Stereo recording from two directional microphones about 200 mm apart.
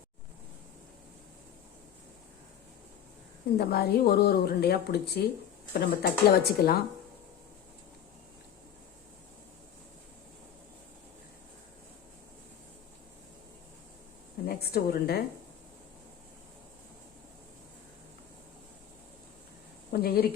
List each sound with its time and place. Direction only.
3.6 s speech: 50° left (ahead or behind)
14.4 s a woman's voice: 50° left (ahead or behind)
19.9 s speech: 50° left (ahead or behind)